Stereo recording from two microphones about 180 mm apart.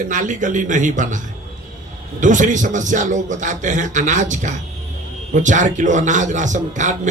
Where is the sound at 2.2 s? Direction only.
45° right (ahead or behind).